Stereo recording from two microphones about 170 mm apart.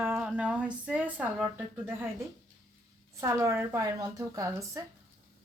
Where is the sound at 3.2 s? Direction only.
15° right (ahead or behind).